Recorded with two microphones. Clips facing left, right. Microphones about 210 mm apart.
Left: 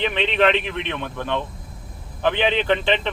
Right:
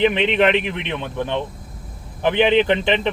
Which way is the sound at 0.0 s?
15° right (ahead or behind).